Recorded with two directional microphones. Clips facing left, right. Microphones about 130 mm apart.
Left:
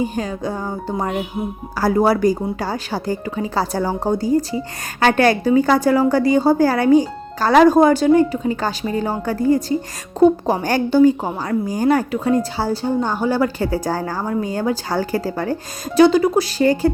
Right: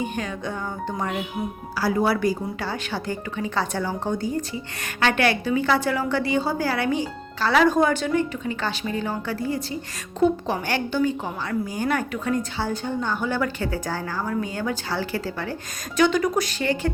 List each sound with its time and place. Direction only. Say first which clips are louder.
0.0 s a woman's voice: left 6 dB; 35° left (ahead or behind)